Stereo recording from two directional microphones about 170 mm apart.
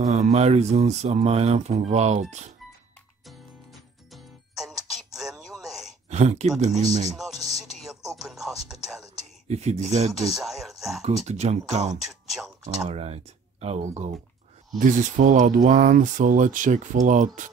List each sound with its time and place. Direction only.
0.0 s speech: 40° right (ahead or behind)
3.3 s music: centre (ahead or behind)
4.8 s a sound: centre (ahead or behind)
6.0 s speech: 40° right (ahead or behind)
7.2 s music: centre (ahead or behind)
9.2 s speech: 40° right (ahead or behind)
10.1 s speech: centre (ahead or behind)
11.0 s speech: 40° right (ahead or behind)
12.0 s speech: centre (ahead or behind)
12.6 s speech: 40° right (ahead or behind)